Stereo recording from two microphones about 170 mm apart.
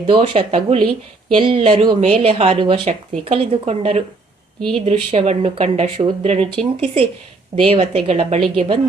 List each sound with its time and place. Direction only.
0.2 s speech: 35° right (ahead or behind)